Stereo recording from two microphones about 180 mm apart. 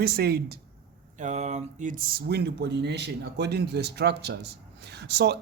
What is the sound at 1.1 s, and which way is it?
Speech, 40° right (ahead or behind).